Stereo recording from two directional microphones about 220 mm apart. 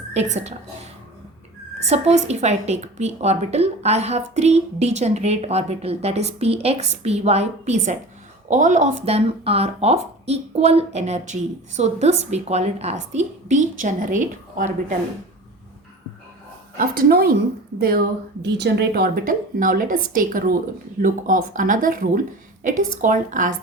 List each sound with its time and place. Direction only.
0.1 s a woman's voice: 30° right (ahead or behind)
1.8 s a woman's voice: 30° right (ahead or behind)
17.0 s a woman's voice: 45° right (ahead or behind)